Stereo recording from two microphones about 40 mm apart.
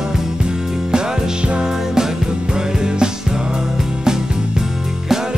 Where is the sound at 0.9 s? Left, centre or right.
Right.